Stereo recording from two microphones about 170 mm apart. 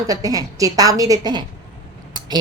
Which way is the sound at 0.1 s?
20° right (ahead or behind).